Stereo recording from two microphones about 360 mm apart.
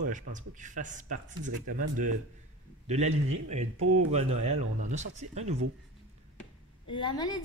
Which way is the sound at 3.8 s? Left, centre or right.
Right.